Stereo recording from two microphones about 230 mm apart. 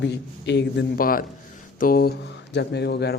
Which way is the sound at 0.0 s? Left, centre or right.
Left.